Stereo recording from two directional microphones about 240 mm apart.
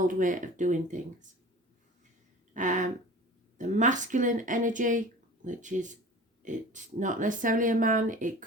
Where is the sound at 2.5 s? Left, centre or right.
Right.